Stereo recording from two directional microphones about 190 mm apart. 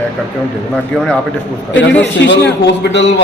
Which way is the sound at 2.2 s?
65° left (ahead or behind).